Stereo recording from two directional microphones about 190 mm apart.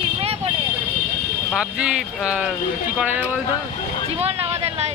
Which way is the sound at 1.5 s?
5° right (ahead or behind).